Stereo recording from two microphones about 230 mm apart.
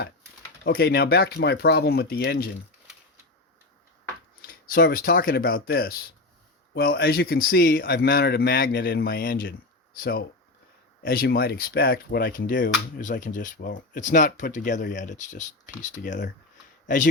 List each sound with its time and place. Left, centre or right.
0.6 s speech: left
4.4 s speech: left